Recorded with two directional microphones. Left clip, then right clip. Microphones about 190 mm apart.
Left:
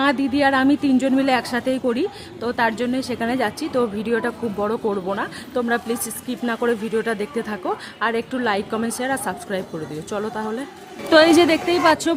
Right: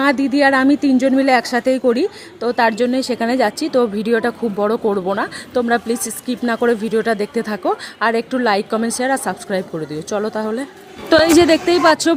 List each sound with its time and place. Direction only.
0.0 s a woman's voice: 20° right (ahead or behind)